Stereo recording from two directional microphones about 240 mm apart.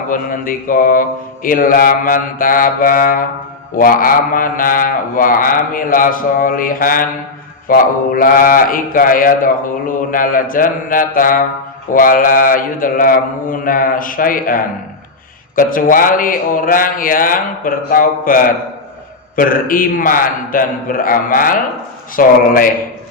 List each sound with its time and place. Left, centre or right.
0.1 s mantra: left